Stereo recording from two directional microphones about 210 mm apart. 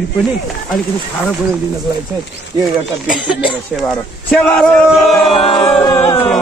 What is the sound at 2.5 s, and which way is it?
Speech, 20° right (ahead or behind).